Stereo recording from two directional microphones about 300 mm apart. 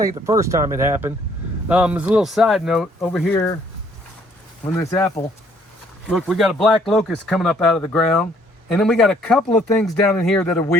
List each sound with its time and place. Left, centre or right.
0.3 s speech: centre
4.6 s speech: centre